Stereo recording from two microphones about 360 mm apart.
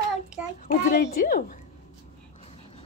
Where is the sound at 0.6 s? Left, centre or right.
Left.